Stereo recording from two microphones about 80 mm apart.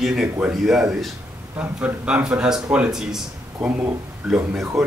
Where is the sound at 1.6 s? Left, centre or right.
Centre.